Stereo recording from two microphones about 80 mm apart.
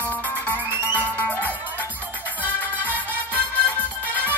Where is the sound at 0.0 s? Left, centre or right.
Left.